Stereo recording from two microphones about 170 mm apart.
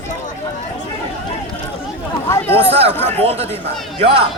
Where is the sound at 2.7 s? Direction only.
35° right (ahead or behind).